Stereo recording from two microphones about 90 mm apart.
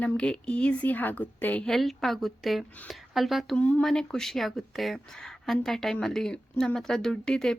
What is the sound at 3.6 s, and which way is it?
Speech, 15° left (ahead or behind).